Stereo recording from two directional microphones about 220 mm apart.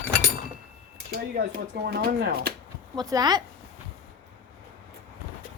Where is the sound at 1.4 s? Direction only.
45° right (ahead or behind).